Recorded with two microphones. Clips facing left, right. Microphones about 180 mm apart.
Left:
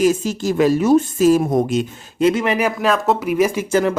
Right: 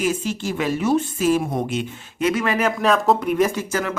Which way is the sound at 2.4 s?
15° left (ahead or behind).